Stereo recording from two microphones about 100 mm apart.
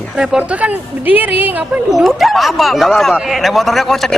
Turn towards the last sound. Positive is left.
turn(degrees=0)  # may be behind; listen again after turning